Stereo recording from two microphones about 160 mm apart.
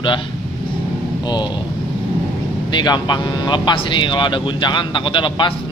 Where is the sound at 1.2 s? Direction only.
25° left (ahead or behind).